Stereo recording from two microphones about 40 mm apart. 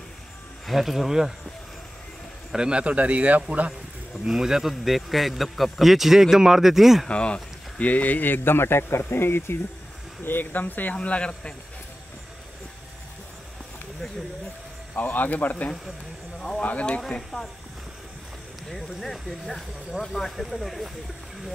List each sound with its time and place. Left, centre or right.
0.7 s a man's voice: centre
2.5 s speech: centre
2.8 s speech: right
4.3 s a man's voice: centre
7.1 s speech: left
7.8 s speech: left
10.2 s speech: left
11.0 s speech: left
15.0 s speech: left
16.3 s a sound: centre
18.7 s a man's voice: centre